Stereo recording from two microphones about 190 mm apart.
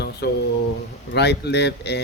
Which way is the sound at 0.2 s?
60° left (ahead or behind).